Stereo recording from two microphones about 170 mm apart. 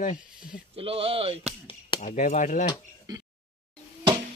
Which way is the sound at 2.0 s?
50° left (ahead or behind).